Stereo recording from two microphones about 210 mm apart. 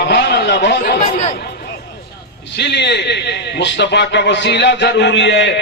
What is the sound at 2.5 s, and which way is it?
A man's voice, 55° left (ahead or behind).